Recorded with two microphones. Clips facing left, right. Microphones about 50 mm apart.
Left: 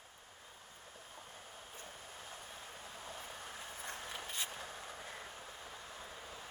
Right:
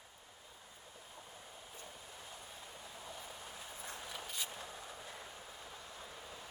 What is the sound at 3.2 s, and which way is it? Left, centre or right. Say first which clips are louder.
Vehicle: left 2 dB; left.